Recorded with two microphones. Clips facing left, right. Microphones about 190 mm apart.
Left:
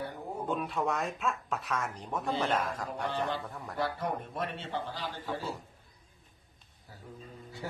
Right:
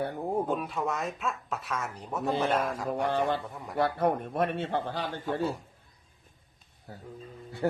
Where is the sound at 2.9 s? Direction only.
55° right (ahead or behind).